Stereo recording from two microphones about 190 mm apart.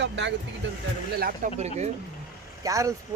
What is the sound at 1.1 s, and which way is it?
Speech, 50° right (ahead or behind).